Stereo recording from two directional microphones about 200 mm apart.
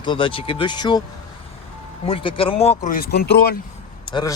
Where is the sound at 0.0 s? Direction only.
25° left (ahead or behind).